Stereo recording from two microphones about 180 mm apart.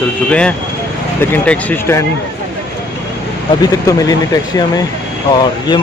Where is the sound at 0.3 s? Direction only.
5° left (ahead or behind).